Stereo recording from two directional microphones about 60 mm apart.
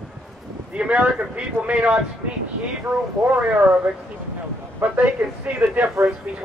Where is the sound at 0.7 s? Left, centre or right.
Centre.